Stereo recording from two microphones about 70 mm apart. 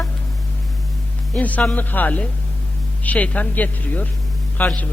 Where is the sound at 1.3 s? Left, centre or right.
Left.